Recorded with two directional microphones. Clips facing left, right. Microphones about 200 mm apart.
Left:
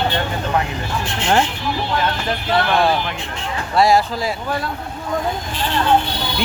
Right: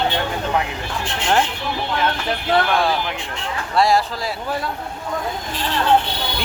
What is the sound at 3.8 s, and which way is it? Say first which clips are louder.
Speech: left 2 dB; centre (ahead or behind).